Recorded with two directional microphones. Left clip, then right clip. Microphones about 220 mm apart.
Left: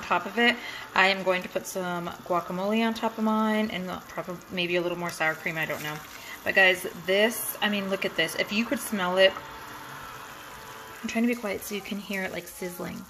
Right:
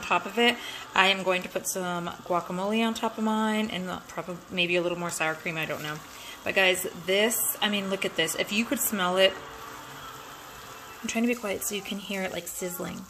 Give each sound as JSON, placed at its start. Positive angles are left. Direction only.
{"t": 0.0, "sound": "speech", "side_deg": -5}
{"t": 8.4, "sound": "speech", "side_deg": -45}
{"t": 8.6, "sound": "speech", "side_deg": -10}
{"t": 11.1, "sound": "speech", "side_deg": -5}